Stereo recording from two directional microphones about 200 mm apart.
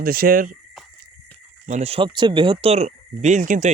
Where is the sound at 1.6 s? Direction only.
35° right (ahead or behind).